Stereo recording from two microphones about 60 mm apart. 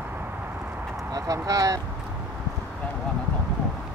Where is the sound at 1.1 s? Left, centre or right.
Right.